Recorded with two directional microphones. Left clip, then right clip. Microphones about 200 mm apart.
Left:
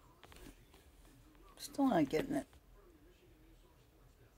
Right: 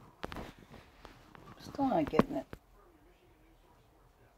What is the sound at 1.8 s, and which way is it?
Speech, 10° left (ahead or behind).